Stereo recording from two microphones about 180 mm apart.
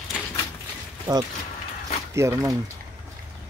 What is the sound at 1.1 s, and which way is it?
Speech, 20° right (ahead or behind).